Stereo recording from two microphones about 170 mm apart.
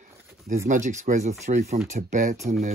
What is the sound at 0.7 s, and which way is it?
Speech, 45° right (ahead or behind).